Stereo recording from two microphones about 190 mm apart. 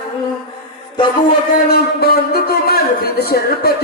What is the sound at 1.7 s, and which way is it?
Speech, 55° left (ahead or behind).